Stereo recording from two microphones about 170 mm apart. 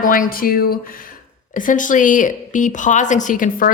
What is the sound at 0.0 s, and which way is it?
Speech, 55° left (ahead or behind).